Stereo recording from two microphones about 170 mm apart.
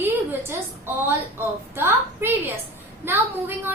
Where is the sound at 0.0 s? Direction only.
15° right (ahead or behind).